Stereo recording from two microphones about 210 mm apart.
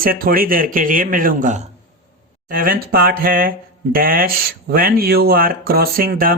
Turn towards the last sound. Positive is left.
turn(degrees=-45)  # may be behind; listen again after turning